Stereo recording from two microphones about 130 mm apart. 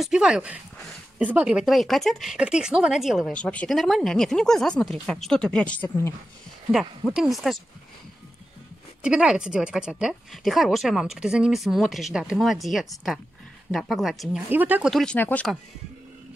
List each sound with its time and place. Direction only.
0.0 s speech: 5° right (ahead or behind)
6.7 s speech: 5° right (ahead or behind)
9.0 s speech: 5° right (ahead or behind)
14.5 s speech: 15° right (ahead or behind)
14.9 s speech: centre (ahead or behind)
15.1 s speech: 15° left (ahead or behind)